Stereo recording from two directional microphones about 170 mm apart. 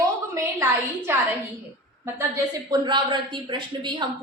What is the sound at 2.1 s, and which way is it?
A woman's voice, 20° right (ahead or behind).